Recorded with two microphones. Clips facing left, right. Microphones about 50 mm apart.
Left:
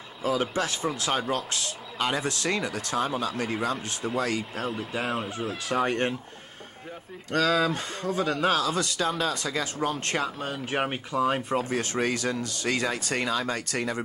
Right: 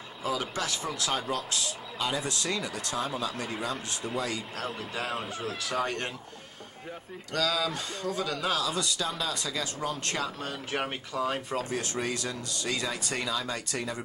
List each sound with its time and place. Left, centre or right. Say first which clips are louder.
0.2 s speech: left 5 dB; left
1.3 s speech: left 2 dB; left
3.7 s speech: left 4 dB; centre
5.8 s speech: left 6 dB; left
7.3 s speech: left 5 dB; left
10.4 s speech: left 4 dB; centre
11.7 s speech: left 5 dB; left